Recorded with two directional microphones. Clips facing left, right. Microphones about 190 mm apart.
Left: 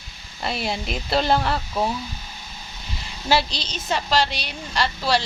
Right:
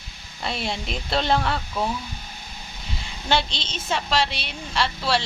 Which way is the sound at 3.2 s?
5° left (ahead or behind).